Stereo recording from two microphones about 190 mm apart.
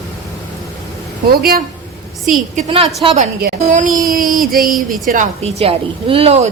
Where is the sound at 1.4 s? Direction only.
50° right (ahead or behind).